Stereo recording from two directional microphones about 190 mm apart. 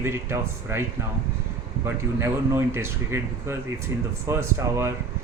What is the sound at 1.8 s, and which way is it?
Speech, 15° right (ahead or behind).